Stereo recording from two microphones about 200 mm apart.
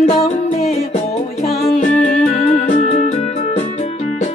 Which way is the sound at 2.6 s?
35° left (ahead or behind).